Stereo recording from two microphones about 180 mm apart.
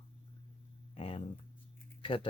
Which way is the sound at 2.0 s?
30° left (ahead or behind).